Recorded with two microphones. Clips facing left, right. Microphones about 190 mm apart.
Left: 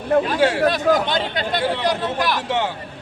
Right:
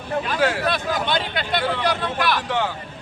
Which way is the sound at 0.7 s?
40° left (ahead or behind).